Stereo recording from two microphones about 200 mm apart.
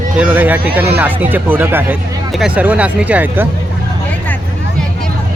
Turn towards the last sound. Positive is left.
turn(degrees=-10)  # may be behind; listen again after turning